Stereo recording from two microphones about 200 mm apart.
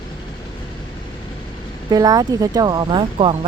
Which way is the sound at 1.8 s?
20° right (ahead or behind).